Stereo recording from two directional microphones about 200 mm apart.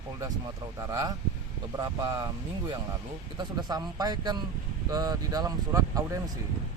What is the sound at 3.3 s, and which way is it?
Speech, 20° right (ahead or behind).